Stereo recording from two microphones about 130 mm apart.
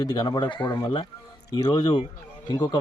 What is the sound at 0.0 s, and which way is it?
Speech, 30° left (ahead or behind).